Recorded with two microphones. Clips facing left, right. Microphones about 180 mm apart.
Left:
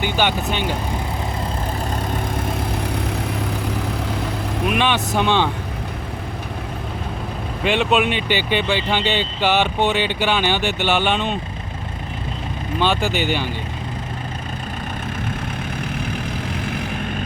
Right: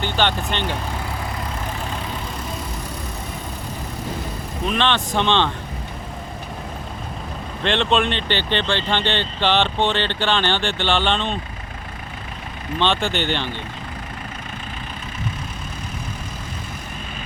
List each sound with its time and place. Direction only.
0.0 s speech: 10° left (ahead or behind)
2.8 s vehicle: 65° left (ahead or behind)
4.6 s speech: 10° left (ahead or behind)
7.6 s speech: 5° left (ahead or behind)
12.8 s speech: 5° left (ahead or behind)